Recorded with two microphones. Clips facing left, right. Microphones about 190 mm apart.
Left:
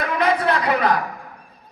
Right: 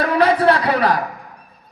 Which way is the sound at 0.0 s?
30° right (ahead or behind).